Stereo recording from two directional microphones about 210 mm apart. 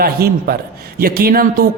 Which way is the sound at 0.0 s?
45° right (ahead or behind).